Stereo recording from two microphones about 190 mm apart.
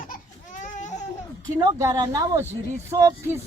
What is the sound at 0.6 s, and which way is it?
Baby cry, 40° left (ahead or behind).